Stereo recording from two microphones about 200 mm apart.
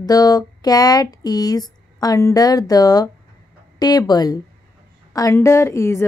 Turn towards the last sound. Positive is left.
turn(degrees=15)  # may be behind; listen again after turning